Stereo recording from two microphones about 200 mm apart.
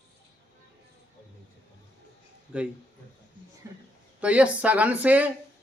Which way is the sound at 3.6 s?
15° right (ahead or behind).